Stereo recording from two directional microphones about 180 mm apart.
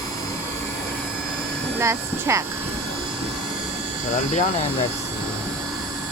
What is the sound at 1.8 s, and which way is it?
Speech, 15° right (ahead or behind).